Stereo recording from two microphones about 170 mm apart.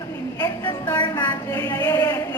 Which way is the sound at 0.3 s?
15° left (ahead or behind).